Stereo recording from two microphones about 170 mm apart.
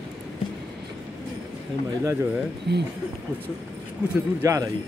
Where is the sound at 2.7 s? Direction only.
80° right.